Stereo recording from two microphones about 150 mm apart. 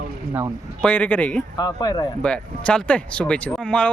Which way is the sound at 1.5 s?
30° left (ahead or behind).